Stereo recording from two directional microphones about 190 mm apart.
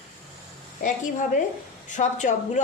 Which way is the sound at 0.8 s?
40° left (ahead or behind).